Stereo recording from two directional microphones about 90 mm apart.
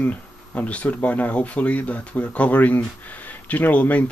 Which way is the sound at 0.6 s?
15° left (ahead or behind).